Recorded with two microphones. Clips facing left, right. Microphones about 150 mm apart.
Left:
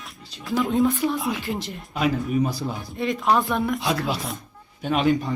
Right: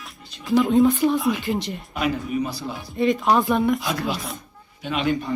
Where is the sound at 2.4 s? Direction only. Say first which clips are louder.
Left 2 dB; 50° left (ahead or behind).